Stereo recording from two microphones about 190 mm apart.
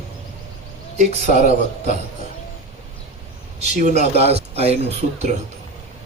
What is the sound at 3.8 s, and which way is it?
Speech, 35° right (ahead or behind).